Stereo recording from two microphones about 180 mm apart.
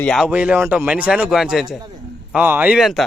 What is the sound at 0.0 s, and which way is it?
Speech, 5° left (ahead or behind).